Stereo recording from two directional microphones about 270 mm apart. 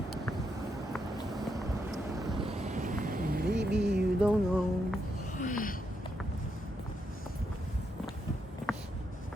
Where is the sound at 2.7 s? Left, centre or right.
Right.